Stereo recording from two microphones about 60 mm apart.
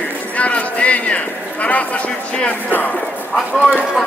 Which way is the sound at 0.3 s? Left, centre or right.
Left.